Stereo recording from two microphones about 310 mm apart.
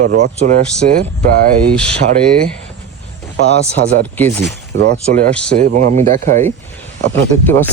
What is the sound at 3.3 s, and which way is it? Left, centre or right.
Speech, right.